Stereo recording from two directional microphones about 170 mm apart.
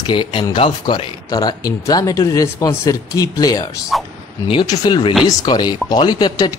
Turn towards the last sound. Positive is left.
turn(degrees=20)  # may be behind; listen again after turning